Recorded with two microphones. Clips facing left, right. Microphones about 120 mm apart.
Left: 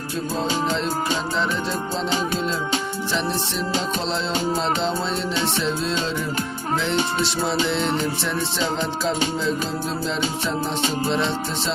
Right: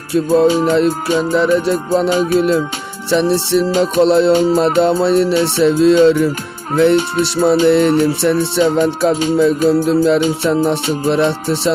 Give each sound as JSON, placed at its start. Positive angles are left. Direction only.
{"t": 0.4, "sound": "music", "side_deg": -55}
{"t": 3.1, "sound": "music", "side_deg": -75}
{"t": 6.7, "sound": "music", "side_deg": -60}